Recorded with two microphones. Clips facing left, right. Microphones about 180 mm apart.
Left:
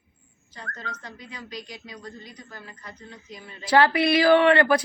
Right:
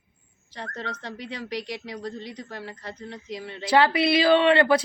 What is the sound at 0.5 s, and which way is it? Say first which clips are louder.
Speech: right 4 dB; 75° right (ahead or behind).